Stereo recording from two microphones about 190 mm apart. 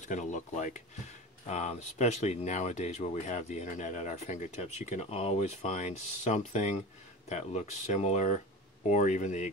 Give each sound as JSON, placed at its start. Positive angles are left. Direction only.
{"t": 0.0, "sound": "speech", "side_deg": 40}